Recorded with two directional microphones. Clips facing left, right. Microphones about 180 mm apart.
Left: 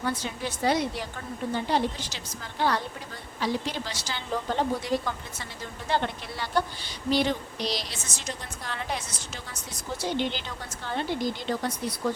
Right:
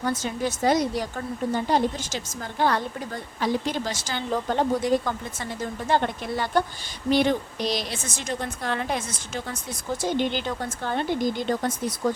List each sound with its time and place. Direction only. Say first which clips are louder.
0.0 s speech: right 4 dB; 45° right (ahead or behind)
10.0 s speech: right 4 dB; 50° right (ahead or behind)